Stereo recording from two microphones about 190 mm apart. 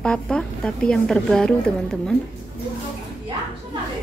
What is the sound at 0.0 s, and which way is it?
A woman's voice, 5° left (ahead or behind).